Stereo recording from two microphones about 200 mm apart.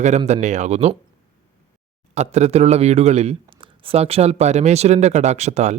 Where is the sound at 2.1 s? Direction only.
35° right (ahead or behind).